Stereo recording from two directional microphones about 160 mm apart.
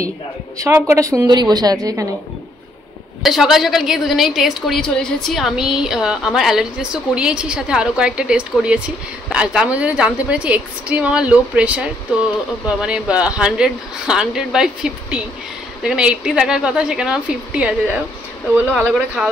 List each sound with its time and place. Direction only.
0.6 s a woman's voice: 15° right (ahead or behind)
3.2 s a woman's voice: centre (ahead or behind)
18.7 s a woman's voice: 5° left (ahead or behind)